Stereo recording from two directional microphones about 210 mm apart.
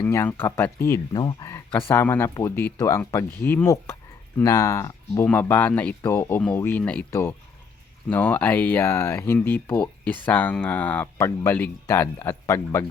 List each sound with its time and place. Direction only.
0.0 s speech: 10° left (ahead or behind)